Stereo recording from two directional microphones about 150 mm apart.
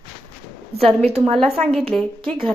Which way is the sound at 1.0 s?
45° right (ahead or behind).